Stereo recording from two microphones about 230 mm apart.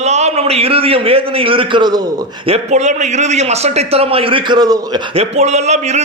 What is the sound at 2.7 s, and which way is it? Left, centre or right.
A man's voice, right.